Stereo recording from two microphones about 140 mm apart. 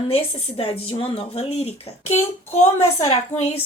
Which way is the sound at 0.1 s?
40° left (ahead or behind).